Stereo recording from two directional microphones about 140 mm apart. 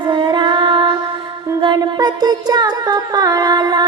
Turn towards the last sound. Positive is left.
turn(degrees=-30)  # may be behind; listen again after turning